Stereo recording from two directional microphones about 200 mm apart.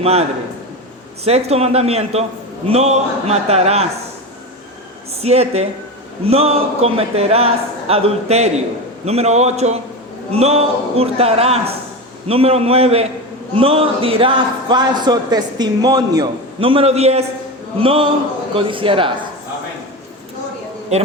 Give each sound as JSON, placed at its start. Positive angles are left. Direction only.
{"t": 0.0, "sound": "speech", "side_deg": -30}
{"t": 5.2, "sound": "a man's voice", "side_deg": -30}